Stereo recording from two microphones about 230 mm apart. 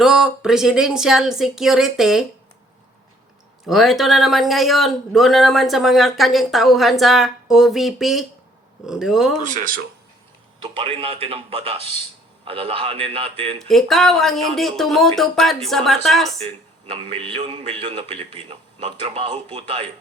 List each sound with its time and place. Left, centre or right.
0.0 s speech: centre
3.7 s speech: centre
9.4 s speech: right
10.6 s a man's voice: right
13.6 s speech: centre
16.4 s a man's voice: right